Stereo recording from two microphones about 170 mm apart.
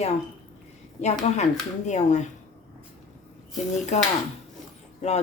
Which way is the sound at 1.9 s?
45° left (ahead or behind).